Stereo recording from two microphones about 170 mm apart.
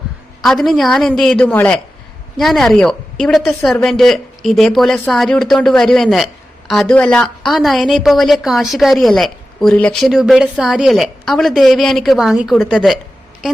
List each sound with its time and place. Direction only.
0.4 s a woman's voice: centre (ahead or behind)